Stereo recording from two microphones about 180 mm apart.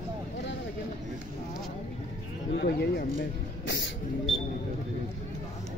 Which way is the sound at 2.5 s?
65° left (ahead or behind).